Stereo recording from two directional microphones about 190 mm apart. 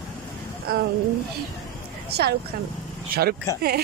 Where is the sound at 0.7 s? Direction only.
55° right (ahead or behind).